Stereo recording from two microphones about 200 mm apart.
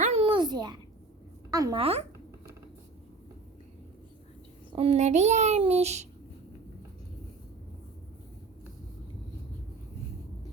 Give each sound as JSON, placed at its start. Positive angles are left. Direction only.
{"t": 0.0, "sound": "a sound", "side_deg": -30}
{"t": 1.5, "sound": "speech", "side_deg": -20}
{"t": 4.7, "sound": "a child's voice", "side_deg": -30}